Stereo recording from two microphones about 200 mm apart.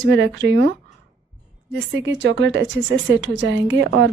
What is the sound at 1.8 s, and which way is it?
A woman's voice, 65° right (ahead or behind).